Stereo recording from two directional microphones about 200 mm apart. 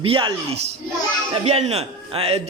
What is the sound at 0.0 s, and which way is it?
A man's voice, 25° right (ahead or behind).